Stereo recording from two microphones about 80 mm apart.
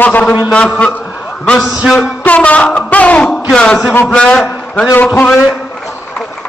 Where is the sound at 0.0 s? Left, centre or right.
Centre.